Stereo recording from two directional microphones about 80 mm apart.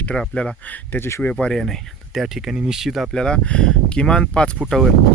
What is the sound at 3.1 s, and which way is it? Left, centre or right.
Speech, centre.